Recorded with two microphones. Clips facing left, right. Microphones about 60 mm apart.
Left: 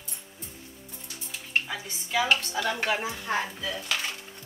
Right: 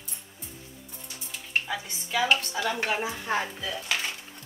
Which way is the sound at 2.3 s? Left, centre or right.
Centre.